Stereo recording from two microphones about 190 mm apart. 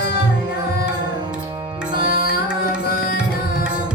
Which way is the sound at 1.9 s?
50° left (ahead or behind).